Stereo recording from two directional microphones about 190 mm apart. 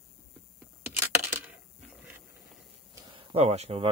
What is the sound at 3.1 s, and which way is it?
Speech, 30° right (ahead or behind).